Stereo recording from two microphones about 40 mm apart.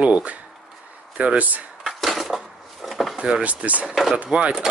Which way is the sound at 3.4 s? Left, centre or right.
Right.